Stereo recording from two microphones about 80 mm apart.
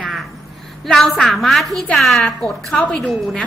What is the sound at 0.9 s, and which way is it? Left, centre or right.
A woman's voice, centre.